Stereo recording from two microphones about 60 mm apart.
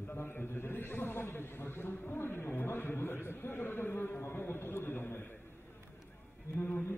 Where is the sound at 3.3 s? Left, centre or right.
Left.